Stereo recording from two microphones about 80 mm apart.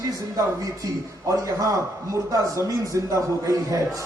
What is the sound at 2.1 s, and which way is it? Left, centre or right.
A man's voice, right.